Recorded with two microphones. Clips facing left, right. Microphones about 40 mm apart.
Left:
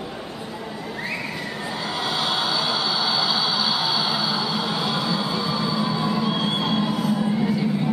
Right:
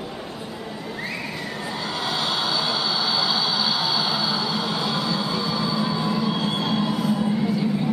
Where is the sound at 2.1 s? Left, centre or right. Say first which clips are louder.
Left 1 dB; centre.